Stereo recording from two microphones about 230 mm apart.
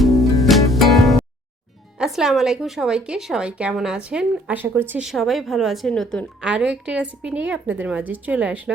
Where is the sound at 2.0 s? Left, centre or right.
Centre.